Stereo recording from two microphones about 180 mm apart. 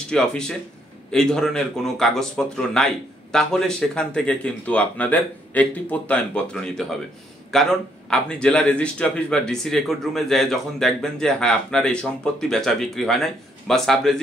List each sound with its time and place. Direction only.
0.1 s speech: 5° left (ahead or behind)